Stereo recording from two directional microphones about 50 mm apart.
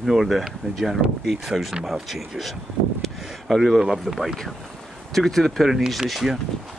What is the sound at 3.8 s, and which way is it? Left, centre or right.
Speech, centre.